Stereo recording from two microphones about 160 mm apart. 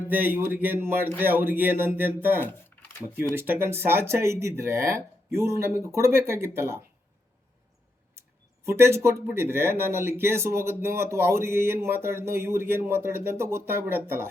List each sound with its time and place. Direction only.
0.1 s speech: 10° right (ahead or behind)
8.6 s speech: 15° right (ahead or behind)